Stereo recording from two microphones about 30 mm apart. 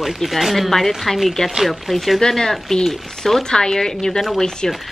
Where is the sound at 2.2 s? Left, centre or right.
Centre.